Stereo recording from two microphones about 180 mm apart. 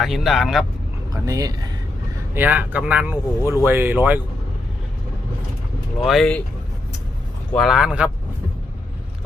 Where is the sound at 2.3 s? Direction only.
10° right (ahead or behind).